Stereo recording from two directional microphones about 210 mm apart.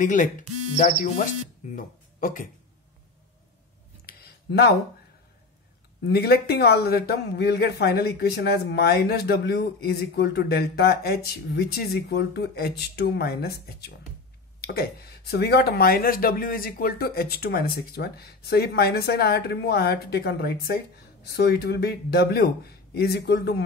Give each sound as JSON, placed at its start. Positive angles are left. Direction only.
{"t": 0.0, "sound": "speech", "side_deg": 35}
{"t": 4.0, "sound": "a sound", "side_deg": 50}
{"t": 6.0, "sound": "a man's voice", "side_deg": 50}